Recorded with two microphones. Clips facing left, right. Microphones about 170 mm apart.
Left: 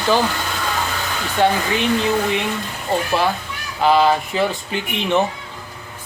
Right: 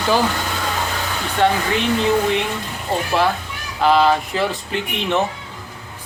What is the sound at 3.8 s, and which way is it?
Speech, 5° left (ahead or behind).